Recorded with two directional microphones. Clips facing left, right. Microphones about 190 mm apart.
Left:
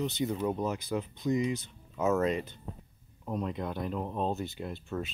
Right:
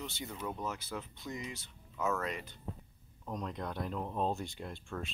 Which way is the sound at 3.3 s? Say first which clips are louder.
Left 5 dB; 5° left (ahead or behind).